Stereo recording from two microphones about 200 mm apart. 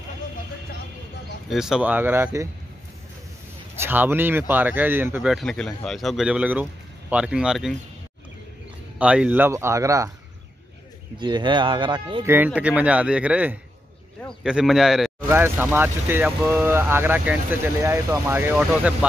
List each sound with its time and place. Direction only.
1.5 s speech: centre (ahead or behind)
3.8 s speech: 10° right (ahead or behind)
8.9 s speech: 5° right (ahead or behind)
11.1 s speech: 20° right (ahead or behind)
12.4 s speech: 5° right (ahead or behind)